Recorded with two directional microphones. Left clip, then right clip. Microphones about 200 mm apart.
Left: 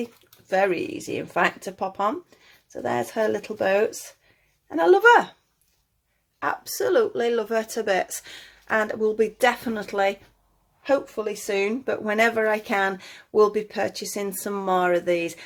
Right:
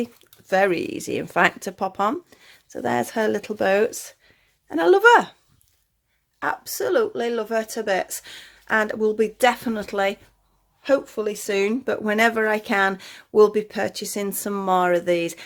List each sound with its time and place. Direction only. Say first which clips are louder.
0.5 s speech: right 2 dB; 40° right (ahead or behind)
6.4 s speech: even; 25° right (ahead or behind)
10.8 s speech: right 2 dB; 40° right (ahead or behind)